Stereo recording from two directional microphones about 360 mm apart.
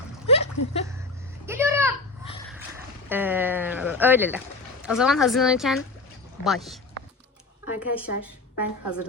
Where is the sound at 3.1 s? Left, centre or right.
Centre.